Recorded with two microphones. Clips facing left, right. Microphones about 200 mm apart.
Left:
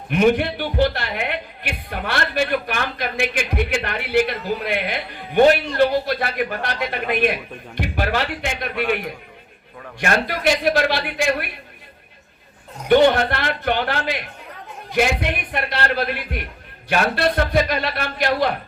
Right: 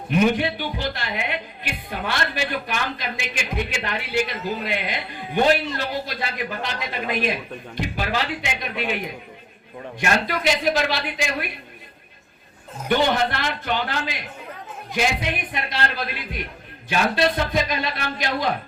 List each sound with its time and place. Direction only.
0.1 s speech: 55° left (ahead or behind)
10.0 s speech: 55° left (ahead or behind)
12.9 s speech: 55° left (ahead or behind)